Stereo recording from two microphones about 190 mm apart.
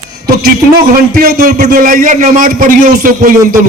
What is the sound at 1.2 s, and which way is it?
A man's voice, 50° right (ahead or behind).